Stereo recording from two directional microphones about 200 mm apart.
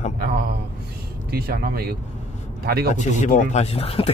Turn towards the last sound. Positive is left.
turn(degrees=30)  # may be behind; listen again after turning